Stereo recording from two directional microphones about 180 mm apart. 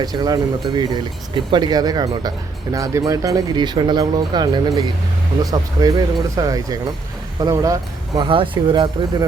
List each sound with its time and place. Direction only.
0.0 s speech: 20° right (ahead or behind)